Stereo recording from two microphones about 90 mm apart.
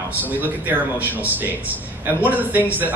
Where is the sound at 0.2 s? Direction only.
20° right (ahead or behind).